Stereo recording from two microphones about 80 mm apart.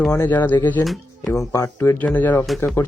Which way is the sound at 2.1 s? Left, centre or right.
Left.